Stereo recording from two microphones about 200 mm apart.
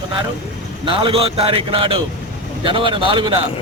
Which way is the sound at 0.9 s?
25° right (ahead or behind).